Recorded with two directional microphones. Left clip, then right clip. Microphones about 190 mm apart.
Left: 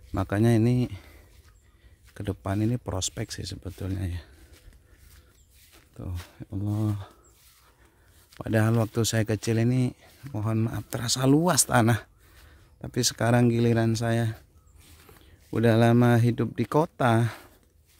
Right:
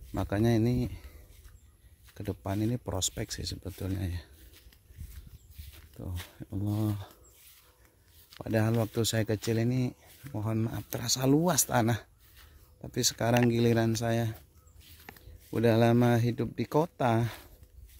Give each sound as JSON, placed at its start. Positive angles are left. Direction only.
{"t": 0.1, "sound": "speech", "side_deg": 25}
{"t": 2.1, "sound": "speech", "side_deg": 25}
{"t": 5.6, "sound": "zipper", "side_deg": 0}
{"t": 6.3, "sound": "speech", "side_deg": 10}
{"t": 8.5, "sound": "speech", "side_deg": 25}
{"t": 15.5, "sound": "speech", "side_deg": 20}